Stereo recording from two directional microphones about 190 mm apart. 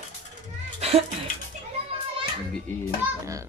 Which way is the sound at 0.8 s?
35° right (ahead or behind).